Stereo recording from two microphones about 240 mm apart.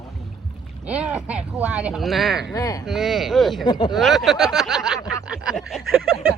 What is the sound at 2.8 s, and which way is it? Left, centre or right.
Speech, centre.